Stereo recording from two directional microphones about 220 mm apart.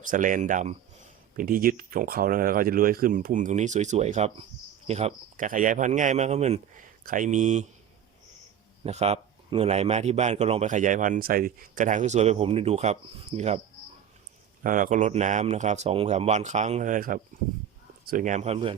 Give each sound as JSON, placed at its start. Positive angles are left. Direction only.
{"t": 0.1, "sound": "speech", "side_deg": -35}
{"t": 8.8, "sound": "speech", "side_deg": -30}
{"t": 14.6, "sound": "speech", "side_deg": -40}